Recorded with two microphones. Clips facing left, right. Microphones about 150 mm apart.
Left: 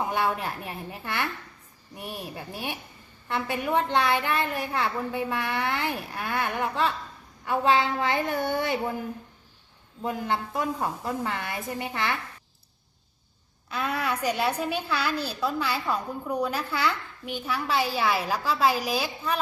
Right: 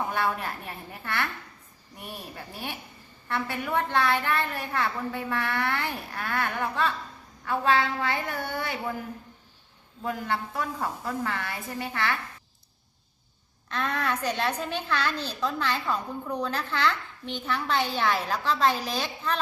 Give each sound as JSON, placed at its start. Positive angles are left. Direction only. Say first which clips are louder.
{"t": 0.1, "sound": "a woman's voice", "louder": "left 2 dB", "side_deg": 15}
{"t": 10.0, "sound": "a woman's voice", "louder": "left 2 dB", "side_deg": 20}
{"t": 13.7, "sound": "a woman's voice", "louder": "even", "side_deg": 10}